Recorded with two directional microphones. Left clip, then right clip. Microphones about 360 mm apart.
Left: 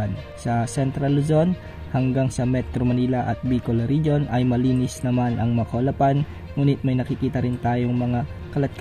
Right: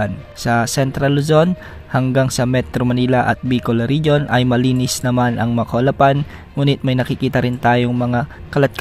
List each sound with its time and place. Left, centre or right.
0.0 s speech: centre
5.5 s a man's voice: right
5.8 s speech: right